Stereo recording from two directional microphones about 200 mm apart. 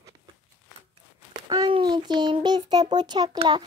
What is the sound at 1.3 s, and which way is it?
A child's voice, 25° right (ahead or behind).